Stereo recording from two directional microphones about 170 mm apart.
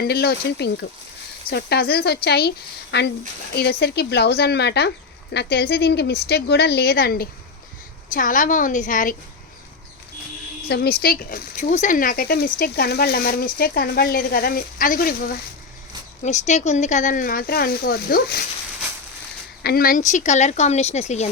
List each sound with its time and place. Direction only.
0.0 s speech: 70° left (ahead or behind)
8.1 s speech: 50° left (ahead or behind)
10.7 s speech: 70° left (ahead or behind)
16.2 s speech: 45° left (ahead or behind); by 18.4 s 65° left (ahead or behind)
19.6 s speech: 60° left (ahead or behind); by 21.2 s 40° left (ahead or behind)